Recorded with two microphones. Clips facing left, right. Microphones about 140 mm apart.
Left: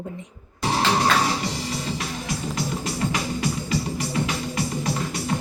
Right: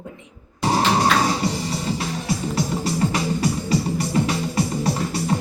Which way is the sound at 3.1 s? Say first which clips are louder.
Right 4 dB; 35° right (ahead or behind).